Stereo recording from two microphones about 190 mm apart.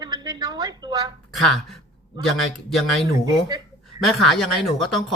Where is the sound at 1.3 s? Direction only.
Centre (ahead or behind).